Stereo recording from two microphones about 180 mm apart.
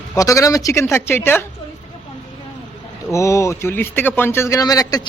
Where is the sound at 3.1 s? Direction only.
15° left (ahead or behind).